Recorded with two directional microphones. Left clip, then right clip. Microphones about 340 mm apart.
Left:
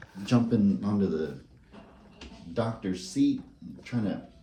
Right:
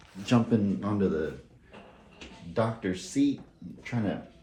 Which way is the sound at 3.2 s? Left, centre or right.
Right.